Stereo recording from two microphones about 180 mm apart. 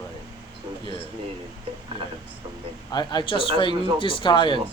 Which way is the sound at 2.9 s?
25° left (ahead or behind).